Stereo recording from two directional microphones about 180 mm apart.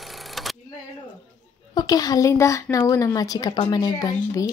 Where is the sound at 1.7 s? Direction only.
20° left (ahead or behind).